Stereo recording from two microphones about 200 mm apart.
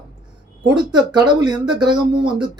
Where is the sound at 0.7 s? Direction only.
20° right (ahead or behind).